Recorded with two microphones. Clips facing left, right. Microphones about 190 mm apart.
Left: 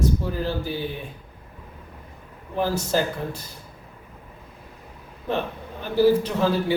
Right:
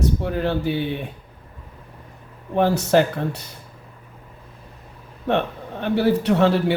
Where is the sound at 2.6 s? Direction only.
70° right (ahead or behind).